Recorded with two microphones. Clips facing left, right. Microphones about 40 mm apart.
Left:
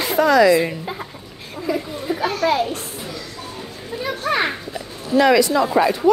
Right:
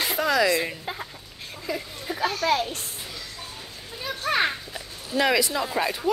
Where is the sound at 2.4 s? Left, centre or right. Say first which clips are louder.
Left 6 dB; left.